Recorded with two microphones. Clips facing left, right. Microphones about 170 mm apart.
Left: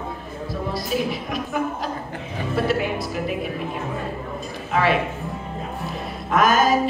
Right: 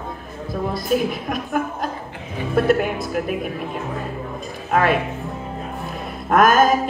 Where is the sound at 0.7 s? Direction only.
50° right (ahead or behind).